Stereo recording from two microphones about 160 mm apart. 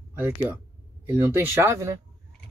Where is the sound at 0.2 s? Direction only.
10° right (ahead or behind).